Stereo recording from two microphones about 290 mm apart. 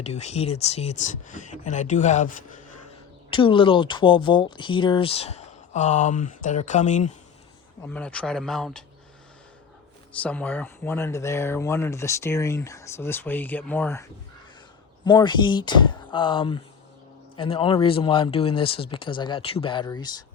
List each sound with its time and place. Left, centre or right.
0.0 s speech: left
7.9 s speech: centre
10.2 s speech: centre